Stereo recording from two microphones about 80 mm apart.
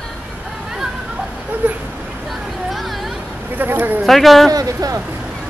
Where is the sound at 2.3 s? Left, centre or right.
Centre.